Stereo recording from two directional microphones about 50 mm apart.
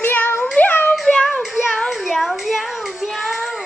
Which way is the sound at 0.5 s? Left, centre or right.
Left.